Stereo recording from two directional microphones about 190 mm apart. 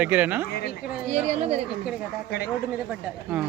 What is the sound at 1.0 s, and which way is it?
Speech, 35° right (ahead or behind).